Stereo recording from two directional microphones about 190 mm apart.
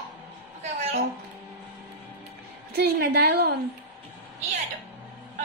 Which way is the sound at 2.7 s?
55° right (ahead or behind).